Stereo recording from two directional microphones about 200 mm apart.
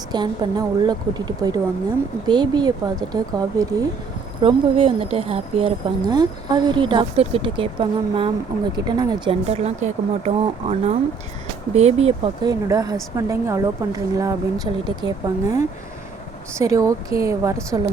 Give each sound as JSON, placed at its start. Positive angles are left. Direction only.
{"t": 0.1, "sound": "a woman's voice", "side_deg": -20}
{"t": 16.6, "sound": "a woman's voice", "side_deg": -15}